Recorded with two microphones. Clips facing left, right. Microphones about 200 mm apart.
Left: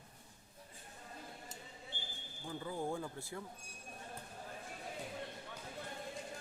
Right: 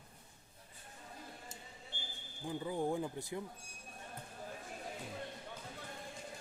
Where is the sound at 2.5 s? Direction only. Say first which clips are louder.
Right 4 dB; 15° right (ahead or behind).